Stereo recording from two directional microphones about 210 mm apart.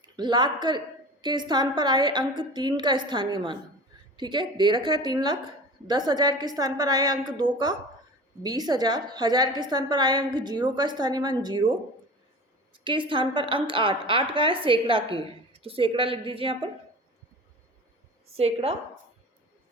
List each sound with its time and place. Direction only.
0.0 s a woman's voice: 20° right (ahead or behind)
12.7 s a woman's voice: 25° right (ahead or behind)
18.3 s a woman's voice: 30° right (ahead or behind)